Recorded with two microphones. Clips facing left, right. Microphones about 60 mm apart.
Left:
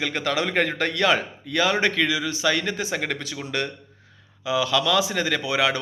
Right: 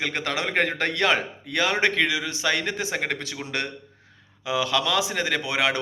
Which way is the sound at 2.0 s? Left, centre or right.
Right.